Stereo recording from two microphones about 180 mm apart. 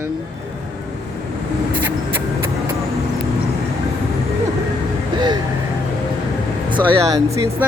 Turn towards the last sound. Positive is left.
turn(degrees=-15)  # may be behind; listen again after turning